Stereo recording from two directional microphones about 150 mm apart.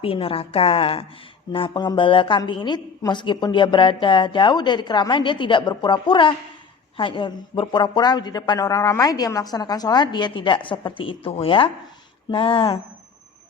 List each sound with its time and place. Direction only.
0.0 s a woman's voice: 40° left (ahead or behind)